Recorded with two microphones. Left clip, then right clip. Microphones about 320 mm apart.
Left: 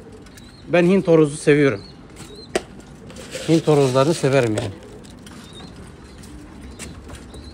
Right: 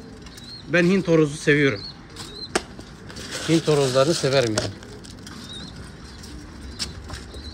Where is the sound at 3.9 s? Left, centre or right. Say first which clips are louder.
Left 2 dB; left.